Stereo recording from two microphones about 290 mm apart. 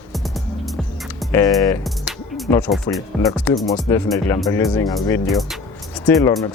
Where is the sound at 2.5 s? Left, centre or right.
Centre.